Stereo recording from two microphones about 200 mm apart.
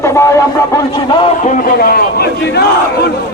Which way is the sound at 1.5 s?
50° left (ahead or behind).